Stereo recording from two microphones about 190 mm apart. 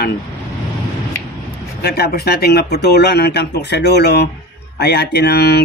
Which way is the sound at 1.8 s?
55° left (ahead or behind).